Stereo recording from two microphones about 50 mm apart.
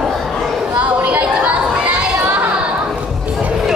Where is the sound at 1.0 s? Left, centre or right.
Right.